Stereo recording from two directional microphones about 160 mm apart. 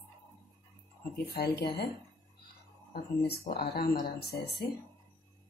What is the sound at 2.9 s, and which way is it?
Speech, 75° left (ahead or behind).